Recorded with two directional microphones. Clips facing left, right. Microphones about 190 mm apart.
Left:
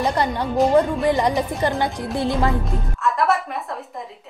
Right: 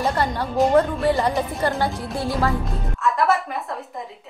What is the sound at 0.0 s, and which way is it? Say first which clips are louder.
A woman's voice: left 1 dB; 15° left (ahead or behind).